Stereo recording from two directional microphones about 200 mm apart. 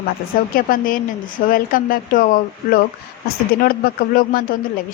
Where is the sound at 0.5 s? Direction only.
45° left (ahead or behind).